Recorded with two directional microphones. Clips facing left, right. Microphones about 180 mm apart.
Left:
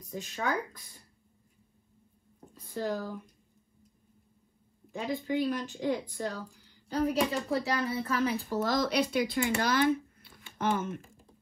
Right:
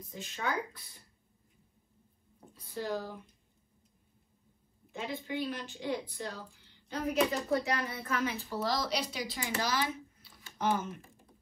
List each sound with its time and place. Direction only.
0.1 s speech: 45° left (ahead or behind)
2.7 s speech: 45° left (ahead or behind)
4.9 s a woman's voice: 45° left (ahead or behind)
8.5 s speech: 50° left (ahead or behind)